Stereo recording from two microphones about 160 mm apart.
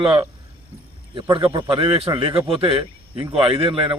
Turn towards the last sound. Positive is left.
turn(degrees=-30)  # may be behind; listen again after turning